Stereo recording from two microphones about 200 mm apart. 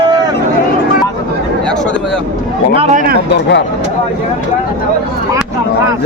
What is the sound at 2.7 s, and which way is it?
Speech, 35° right (ahead or behind).